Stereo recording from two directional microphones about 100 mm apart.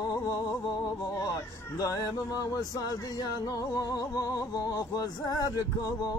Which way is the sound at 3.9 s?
35° left (ahead or behind).